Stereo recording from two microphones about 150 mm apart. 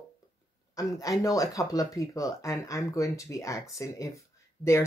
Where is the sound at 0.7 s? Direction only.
25° left (ahead or behind).